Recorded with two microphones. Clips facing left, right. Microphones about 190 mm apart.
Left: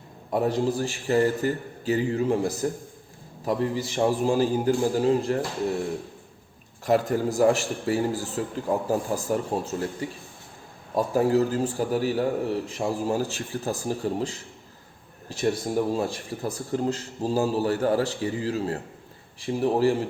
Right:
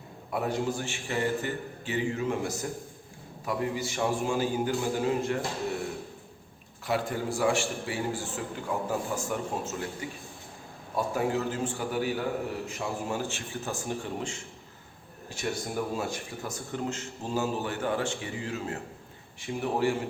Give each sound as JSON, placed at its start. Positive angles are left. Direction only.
{"t": 0.3, "sound": "speech", "side_deg": 35}
{"t": 6.8, "sound": "speech", "side_deg": 40}
{"t": 10.9, "sound": "speech", "side_deg": 35}